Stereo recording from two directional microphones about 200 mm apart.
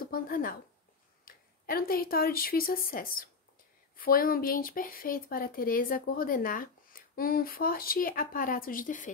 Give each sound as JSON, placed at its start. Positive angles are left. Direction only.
{"t": 0.0, "sound": "speech", "side_deg": 45}